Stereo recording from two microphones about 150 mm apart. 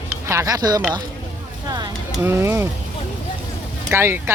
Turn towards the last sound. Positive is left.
turn(degrees=-15)  # may be behind; listen again after turning